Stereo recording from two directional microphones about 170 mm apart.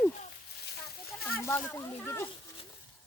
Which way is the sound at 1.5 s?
15° left (ahead or behind).